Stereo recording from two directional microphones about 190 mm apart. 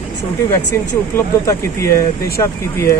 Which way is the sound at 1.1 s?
15° left (ahead or behind).